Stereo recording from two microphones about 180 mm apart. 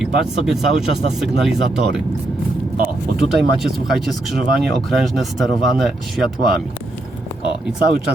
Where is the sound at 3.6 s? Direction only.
Centre (ahead or behind).